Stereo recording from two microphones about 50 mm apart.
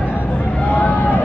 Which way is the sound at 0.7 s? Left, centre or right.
Left.